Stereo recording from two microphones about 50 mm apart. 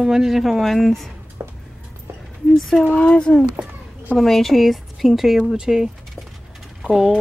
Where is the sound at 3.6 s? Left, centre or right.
Right.